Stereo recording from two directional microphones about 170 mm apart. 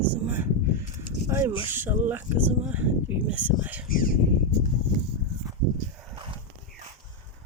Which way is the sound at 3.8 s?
55° left (ahead or behind).